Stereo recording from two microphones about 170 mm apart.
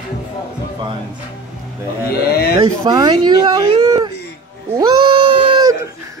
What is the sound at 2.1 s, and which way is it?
Speech, 65° left (ahead or behind).